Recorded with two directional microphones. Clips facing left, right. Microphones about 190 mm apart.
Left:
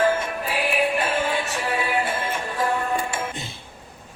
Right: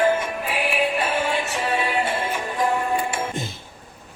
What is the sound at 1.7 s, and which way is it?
Music, 25° right (ahead or behind).